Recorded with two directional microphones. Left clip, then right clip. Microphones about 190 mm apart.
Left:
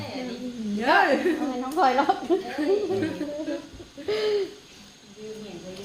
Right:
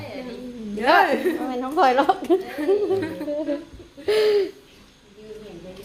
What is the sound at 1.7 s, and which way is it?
Speech, 70° right (ahead or behind).